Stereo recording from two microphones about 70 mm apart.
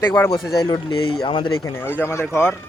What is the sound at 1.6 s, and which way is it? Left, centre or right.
Speech, left.